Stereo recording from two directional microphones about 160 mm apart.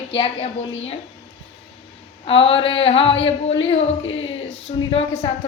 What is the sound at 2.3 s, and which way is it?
Speech, 35° left (ahead or behind).